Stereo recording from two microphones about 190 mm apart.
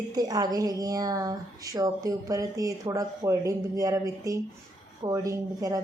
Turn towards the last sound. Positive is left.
turn(degrees=-20)  # may be behind; listen again after turning